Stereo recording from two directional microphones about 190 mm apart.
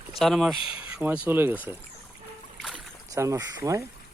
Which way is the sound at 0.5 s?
25° left (ahead or behind).